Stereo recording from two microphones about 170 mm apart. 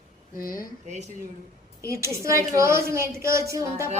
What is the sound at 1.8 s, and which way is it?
A woman's voice, 15° right (ahead or behind).